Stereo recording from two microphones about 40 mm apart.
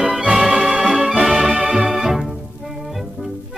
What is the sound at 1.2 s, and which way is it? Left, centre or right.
Organ, centre.